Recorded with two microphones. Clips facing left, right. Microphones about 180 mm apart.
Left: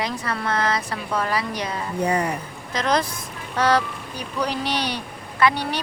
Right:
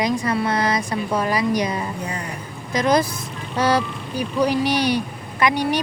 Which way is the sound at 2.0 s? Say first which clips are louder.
Left 8 dB; 65° left (ahead or behind).